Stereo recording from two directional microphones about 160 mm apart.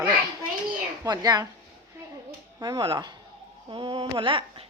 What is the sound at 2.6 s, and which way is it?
A woman's voice, 25° right (ahead or behind).